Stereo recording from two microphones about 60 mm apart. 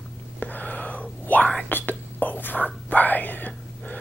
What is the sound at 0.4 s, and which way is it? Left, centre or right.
Whispering, left.